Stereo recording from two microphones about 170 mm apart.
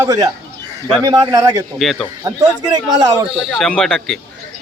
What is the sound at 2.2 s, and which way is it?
A man's voice, 25° right (ahead or behind).